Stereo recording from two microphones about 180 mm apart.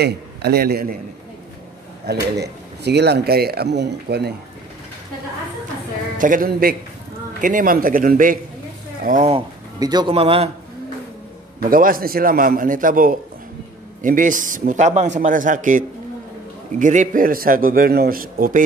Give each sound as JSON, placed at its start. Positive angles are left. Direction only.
{"t": 0.0, "sound": "a man's voice", "side_deg": -65}
{"t": 2.3, "sound": "speech", "side_deg": -65}
{"t": 6.1, "sound": "a man's voice", "side_deg": -50}
{"t": 9.8, "sound": "speech", "side_deg": -20}
{"t": 11.6, "sound": "a man's voice", "side_deg": -50}